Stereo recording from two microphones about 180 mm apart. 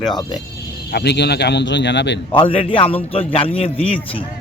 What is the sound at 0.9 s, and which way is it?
A man's voice, 65° left (ahead or behind).